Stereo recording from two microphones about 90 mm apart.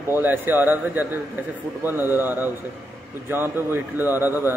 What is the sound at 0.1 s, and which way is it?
A man's voice, 20° right (ahead or behind).